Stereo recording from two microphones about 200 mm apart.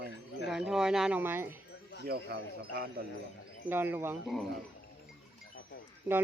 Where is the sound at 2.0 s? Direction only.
50° right (ahead or behind).